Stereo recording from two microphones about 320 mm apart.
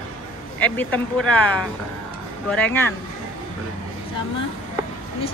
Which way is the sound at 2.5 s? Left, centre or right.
Centre.